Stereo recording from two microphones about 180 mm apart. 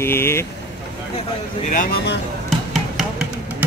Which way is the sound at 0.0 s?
15° left (ahead or behind).